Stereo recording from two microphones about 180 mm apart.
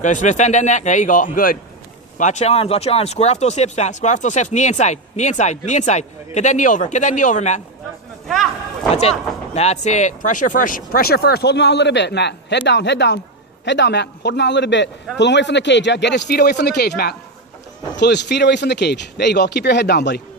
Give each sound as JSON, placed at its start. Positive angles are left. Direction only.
{"t": 0.0, "sound": "speech", "side_deg": 45}
{"t": 8.9, "sound": "speech", "side_deg": 35}